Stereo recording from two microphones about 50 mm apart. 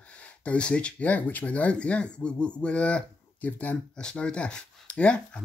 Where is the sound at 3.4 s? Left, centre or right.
Left.